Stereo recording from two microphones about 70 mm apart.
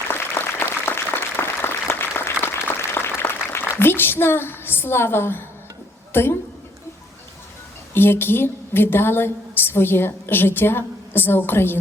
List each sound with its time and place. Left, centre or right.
0.1 s applause: left
6.1 s a woman's voice: left
7.9 s a woman's voice: left